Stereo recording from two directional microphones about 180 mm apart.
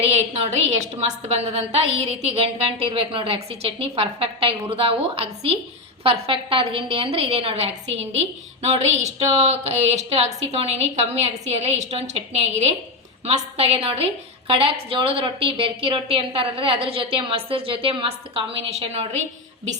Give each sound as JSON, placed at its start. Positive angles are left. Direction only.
{"t": 0.0, "sound": "a woman's voice", "side_deg": -35}